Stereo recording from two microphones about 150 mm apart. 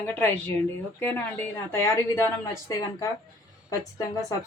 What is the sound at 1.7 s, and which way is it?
Speech, 20° left (ahead or behind).